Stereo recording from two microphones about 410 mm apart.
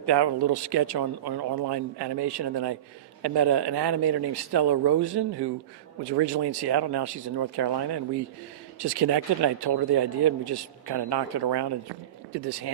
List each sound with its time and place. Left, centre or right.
0.0 s speech: right